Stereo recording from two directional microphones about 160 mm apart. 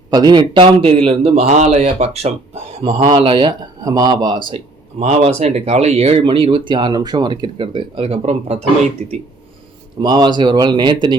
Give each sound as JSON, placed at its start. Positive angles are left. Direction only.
{"t": 0.1, "sound": "speech", "side_deg": -25}
{"t": 3.1, "sound": "speech", "side_deg": -30}
{"t": 5.0, "sound": "speech", "side_deg": -45}
{"t": 10.0, "sound": "speech", "side_deg": -25}